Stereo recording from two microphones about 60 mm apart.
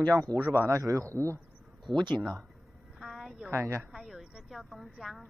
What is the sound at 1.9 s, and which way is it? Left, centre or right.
Speech, centre.